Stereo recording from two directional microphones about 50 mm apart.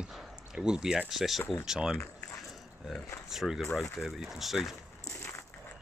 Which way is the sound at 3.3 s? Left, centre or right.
Centre.